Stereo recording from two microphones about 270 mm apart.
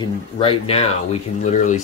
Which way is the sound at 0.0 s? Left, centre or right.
Centre.